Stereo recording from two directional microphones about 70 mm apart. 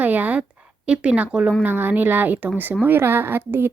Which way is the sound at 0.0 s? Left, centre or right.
Right.